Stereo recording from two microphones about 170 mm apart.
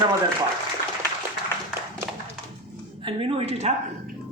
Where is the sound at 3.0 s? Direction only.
35° right (ahead or behind).